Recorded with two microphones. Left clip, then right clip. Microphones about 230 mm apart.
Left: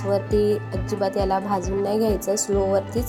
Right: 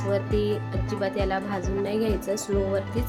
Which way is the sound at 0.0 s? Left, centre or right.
Centre.